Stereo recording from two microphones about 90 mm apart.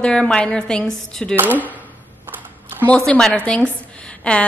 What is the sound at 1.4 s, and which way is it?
Speech, 20° right (ahead or behind).